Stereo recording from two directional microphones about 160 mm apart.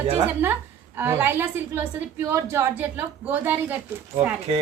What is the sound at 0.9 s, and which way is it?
A woman's voice, 15° right (ahead or behind).